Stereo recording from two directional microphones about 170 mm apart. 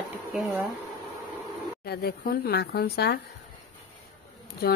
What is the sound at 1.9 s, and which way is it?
A woman's voice, 70° left (ahead or behind).